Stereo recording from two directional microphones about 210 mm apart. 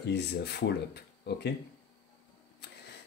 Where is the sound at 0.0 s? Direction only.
50° left (ahead or behind).